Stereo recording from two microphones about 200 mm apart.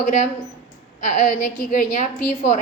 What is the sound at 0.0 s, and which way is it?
A woman's voice, 40° left (ahead or behind).